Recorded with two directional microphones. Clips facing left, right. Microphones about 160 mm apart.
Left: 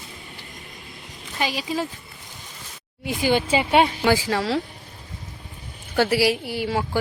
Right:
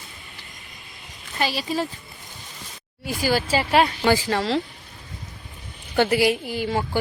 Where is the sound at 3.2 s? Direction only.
20° left (ahead or behind).